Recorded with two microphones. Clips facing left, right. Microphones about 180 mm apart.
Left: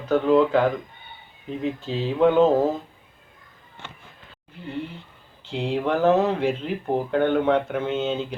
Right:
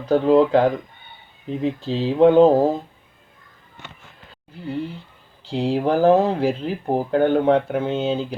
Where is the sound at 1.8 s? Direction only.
35° right (ahead or behind).